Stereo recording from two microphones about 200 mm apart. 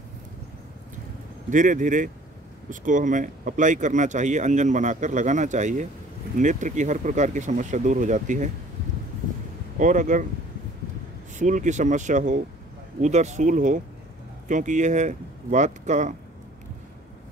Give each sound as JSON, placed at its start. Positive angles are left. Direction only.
{"t": 1.5, "sound": "speech", "side_deg": -40}
{"t": 9.8, "sound": "speech", "side_deg": -40}
{"t": 11.3, "sound": "speech", "side_deg": -40}